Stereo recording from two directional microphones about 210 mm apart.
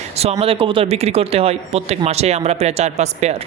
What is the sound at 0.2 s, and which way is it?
Speech, 30° right (ahead or behind).